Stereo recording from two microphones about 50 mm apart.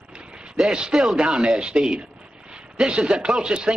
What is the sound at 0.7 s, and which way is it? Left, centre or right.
Speech, centre.